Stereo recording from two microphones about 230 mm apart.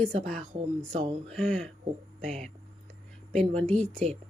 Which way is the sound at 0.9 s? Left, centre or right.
Right.